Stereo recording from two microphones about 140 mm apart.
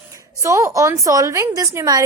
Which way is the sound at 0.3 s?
20° right (ahead or behind).